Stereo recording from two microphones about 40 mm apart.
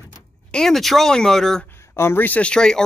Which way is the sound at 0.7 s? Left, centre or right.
Centre.